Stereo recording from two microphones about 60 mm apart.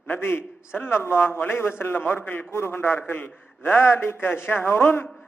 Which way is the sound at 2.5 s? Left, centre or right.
Left.